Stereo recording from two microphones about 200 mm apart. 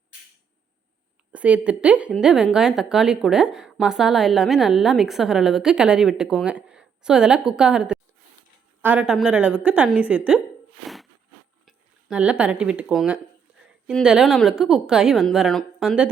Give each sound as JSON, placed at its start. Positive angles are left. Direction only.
{"t": 1.3, "sound": "a woman's voice", "side_deg": -5}
{"t": 11.6, "sound": "a woman's voice", "side_deg": -5}